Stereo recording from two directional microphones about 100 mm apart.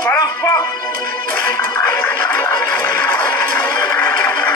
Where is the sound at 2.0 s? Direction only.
15° left (ahead or behind).